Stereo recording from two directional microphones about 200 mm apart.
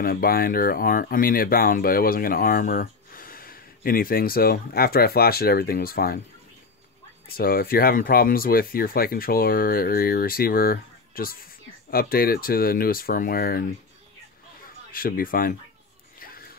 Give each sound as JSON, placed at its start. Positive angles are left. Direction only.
{"t": 0.0, "sound": "speech", "side_deg": 45}
{"t": 7.2, "sound": "speech", "side_deg": 50}
{"t": 14.9, "sound": "speech", "side_deg": 45}
{"t": 16.2, "sound": "a sound", "side_deg": 45}